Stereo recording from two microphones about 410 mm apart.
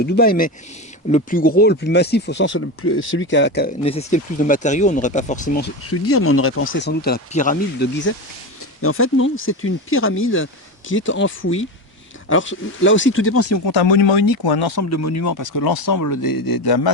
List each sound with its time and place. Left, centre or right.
0.0 s speech: left
13.7 s speech: left
14.3 s speech: left
14.8 s speech: left